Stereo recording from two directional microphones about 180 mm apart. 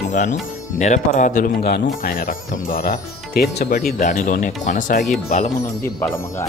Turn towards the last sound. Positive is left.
turn(degrees=45)  # may be behind; listen again after turning